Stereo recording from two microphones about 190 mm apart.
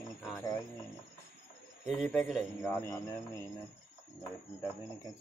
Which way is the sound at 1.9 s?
5° left (ahead or behind).